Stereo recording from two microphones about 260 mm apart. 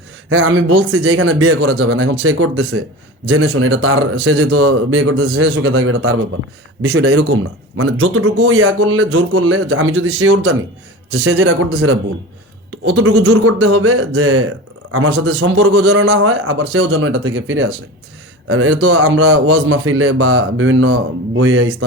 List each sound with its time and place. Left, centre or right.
0.3 s a man's voice: right